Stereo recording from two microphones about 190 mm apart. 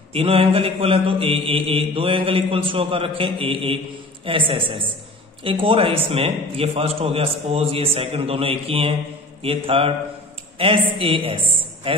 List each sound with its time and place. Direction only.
0.1 s mantra: 30° right (ahead or behind)